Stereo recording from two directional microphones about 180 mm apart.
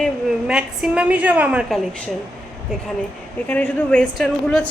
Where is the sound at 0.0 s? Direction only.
5° right (ahead or behind).